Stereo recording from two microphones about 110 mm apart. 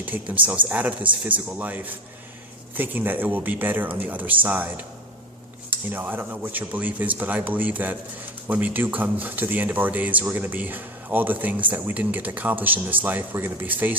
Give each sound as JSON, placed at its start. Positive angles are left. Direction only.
{"t": 0.0, "sound": "speech", "side_deg": -15}
{"t": 5.9, "sound": "speech", "side_deg": -15}